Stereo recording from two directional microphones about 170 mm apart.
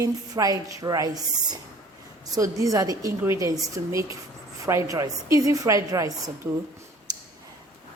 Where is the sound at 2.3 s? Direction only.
20° right (ahead or behind).